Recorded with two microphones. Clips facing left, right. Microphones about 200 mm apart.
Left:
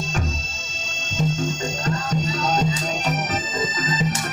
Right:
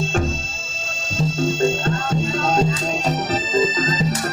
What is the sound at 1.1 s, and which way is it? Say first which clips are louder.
Music: right 3 dB; 35° right (ahead or behind).